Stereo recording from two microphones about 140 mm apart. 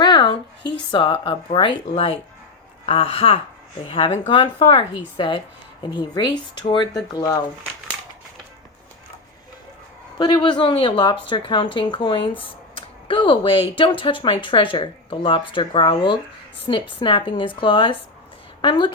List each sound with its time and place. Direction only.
0.0 s a sound: 30° left (ahead or behind)
0.9 s speech: 35° left (ahead or behind)
10.2 s speech: 35° left (ahead or behind)